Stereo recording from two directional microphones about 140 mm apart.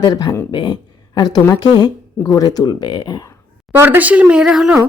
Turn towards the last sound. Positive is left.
turn(degrees=-5)  # may be behind; listen again after turning